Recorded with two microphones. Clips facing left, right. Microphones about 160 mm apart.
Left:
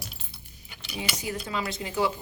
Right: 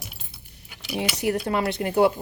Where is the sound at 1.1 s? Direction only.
65° right (ahead or behind).